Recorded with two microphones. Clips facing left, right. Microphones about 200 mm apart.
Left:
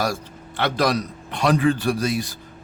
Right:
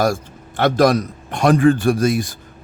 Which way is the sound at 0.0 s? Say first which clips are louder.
Right 6 dB; 50° right (ahead or behind).